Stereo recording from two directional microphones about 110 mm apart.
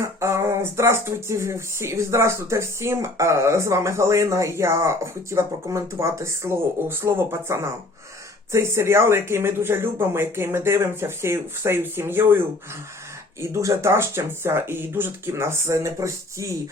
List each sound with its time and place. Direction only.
0.0 s speech: 25° right (ahead or behind)
13.4 s speech: 25° right (ahead or behind)